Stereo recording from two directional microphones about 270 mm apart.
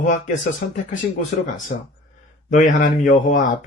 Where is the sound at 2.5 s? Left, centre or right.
Left.